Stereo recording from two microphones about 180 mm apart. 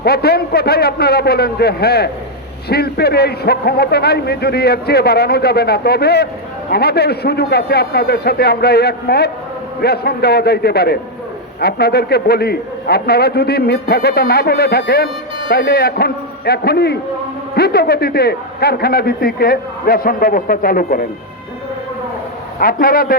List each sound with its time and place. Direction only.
0.0 s a man's voice: 60° left (ahead or behind)
22.6 s a man's voice: 55° left (ahead or behind)